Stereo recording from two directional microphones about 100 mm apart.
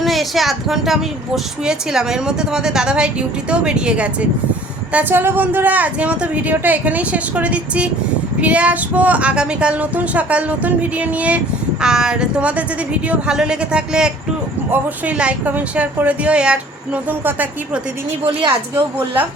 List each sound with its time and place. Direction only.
0.0 s a woman's voice: centre (ahead or behind); by 17.5 s 20° right (ahead or behind)